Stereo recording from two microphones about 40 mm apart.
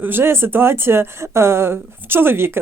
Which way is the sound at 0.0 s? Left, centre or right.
Right.